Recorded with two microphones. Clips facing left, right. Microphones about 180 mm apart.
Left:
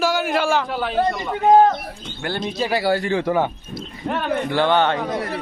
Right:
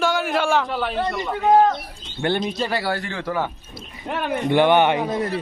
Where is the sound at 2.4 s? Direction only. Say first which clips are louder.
Left 3 dB; 10° left (ahead or behind).